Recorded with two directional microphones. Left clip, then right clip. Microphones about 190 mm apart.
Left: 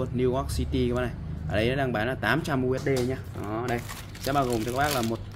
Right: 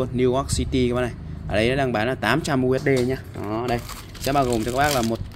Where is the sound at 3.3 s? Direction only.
30° right (ahead or behind).